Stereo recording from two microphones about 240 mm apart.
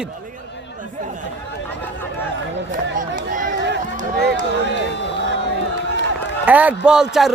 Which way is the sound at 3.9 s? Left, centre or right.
Right.